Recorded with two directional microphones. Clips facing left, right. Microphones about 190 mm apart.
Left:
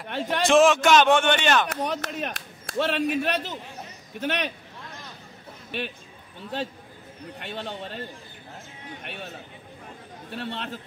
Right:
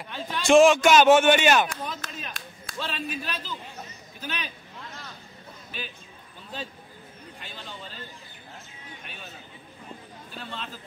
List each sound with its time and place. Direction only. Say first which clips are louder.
0.1 s a man's voice: left 8 dB; 75° left (ahead or behind)
0.5 s a man's voice: right 2 dB; centre (ahead or behind)
1.7 s a man's voice: left 7 dB; 70° left (ahead or behind)
5.7 s speech: left 8 dB; 65° left (ahead or behind)
7.3 s a man's voice: left 9 dB; 70° left (ahead or behind)
9.0 s a man's voice: left 7 dB; 70° left (ahead or behind)
10.3 s a man's voice: left 6 dB; 65° left (ahead or behind)